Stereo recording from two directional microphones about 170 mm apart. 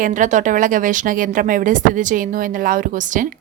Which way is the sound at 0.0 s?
45° right (ahead or behind).